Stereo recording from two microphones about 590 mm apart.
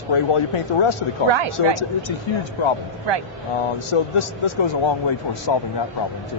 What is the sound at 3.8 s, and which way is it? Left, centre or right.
Speech, left.